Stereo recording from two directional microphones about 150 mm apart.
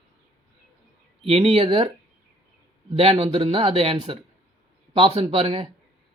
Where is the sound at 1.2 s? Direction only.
40° right (ahead or behind).